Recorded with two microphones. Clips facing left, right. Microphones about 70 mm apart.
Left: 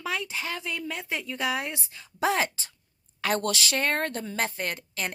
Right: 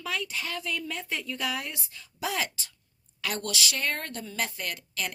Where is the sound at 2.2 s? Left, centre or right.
Left.